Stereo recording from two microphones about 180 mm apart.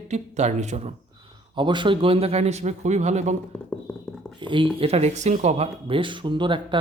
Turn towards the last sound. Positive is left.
turn(degrees=-25)  # may be behind; listen again after turning